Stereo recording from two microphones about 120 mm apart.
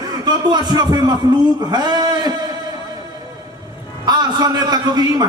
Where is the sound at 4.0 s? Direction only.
35° right (ahead or behind).